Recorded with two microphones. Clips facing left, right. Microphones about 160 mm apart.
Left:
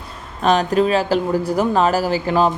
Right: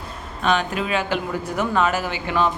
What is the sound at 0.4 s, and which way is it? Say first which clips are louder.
Speech: left 6 dB; 35° left (ahead or behind).